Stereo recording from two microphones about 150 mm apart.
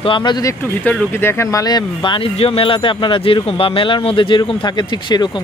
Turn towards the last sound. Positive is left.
turn(degrees=30)  # may be behind; listen again after turning